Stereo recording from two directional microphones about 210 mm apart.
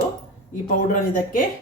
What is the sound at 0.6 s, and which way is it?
Speech, 40° left (ahead or behind).